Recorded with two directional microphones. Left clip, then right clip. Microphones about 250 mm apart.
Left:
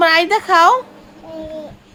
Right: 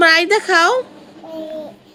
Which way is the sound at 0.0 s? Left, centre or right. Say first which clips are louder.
Right 1 dB; centre.